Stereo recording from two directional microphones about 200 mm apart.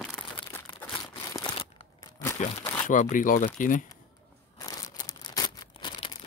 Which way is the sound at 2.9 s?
40° left (ahead or behind).